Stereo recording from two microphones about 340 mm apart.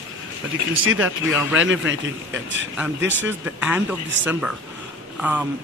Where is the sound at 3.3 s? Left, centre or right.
Centre.